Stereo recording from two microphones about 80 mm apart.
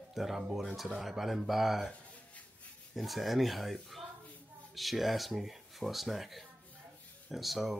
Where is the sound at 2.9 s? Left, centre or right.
Centre.